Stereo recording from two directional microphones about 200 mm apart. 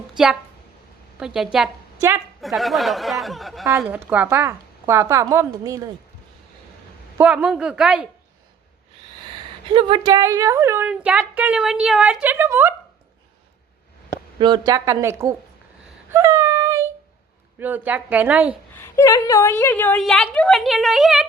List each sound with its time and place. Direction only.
1.2 s a woman's voice: 5° right (ahead or behind)
2.0 s a woman's voice: 15° right (ahead or behind)
2.4 s a woman's voice: centre (ahead or behind); by 5.9 s 15° right (ahead or behind)
7.2 s a woman's voice: 5° right (ahead or behind)
9.7 s speech: 25° right (ahead or behind)
14.3 s speech: 20° right (ahead or behind)
16.1 s child singing: 15° right (ahead or behind)
17.6 s speech: 10° right (ahead or behind)
18.8 s a woman's voice: 15° left (ahead or behind); by 21.2 s centre (ahead or behind)